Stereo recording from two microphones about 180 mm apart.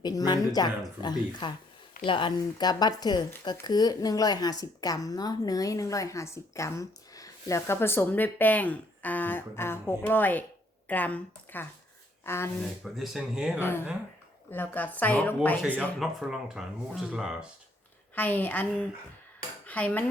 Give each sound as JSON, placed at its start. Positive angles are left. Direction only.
{"t": 0.0, "sound": "speech", "side_deg": 20}
{"t": 12.8, "sound": "speech", "side_deg": 0}
{"t": 13.6, "sound": "speech", "side_deg": 10}
{"t": 18.1, "sound": "speech", "side_deg": 10}